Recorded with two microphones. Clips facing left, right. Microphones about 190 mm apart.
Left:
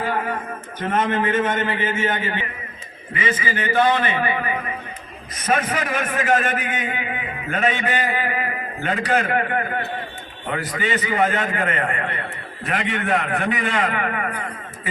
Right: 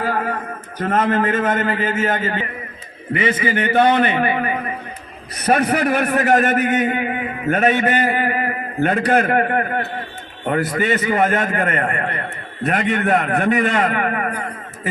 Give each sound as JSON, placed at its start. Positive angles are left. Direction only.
{"t": 0.8, "sound": "a man's voice", "side_deg": -40}
{"t": 3.2, "sound": "a man's voice", "side_deg": -60}
{"t": 4.2, "sound": "a man's voice", "side_deg": -50}
{"t": 5.4, "sound": "a man's voice", "side_deg": -65}
{"t": 6.2, "sound": "a man's voice", "side_deg": -40}